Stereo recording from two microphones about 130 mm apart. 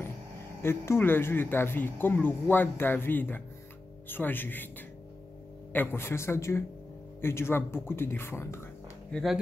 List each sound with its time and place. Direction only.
0.6 s speech: 20° left (ahead or behind)
9.1 s speech: centre (ahead or behind)